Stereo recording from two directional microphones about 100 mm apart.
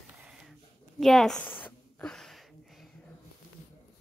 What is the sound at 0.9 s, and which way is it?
Speech, centre (ahead or behind).